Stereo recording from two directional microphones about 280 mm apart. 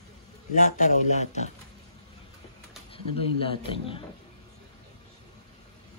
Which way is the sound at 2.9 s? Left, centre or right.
Centre.